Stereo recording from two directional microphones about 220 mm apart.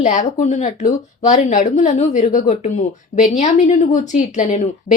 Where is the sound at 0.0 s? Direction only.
30° left (ahead or behind).